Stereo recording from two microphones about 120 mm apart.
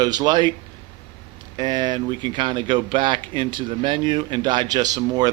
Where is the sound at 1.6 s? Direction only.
35° right (ahead or behind).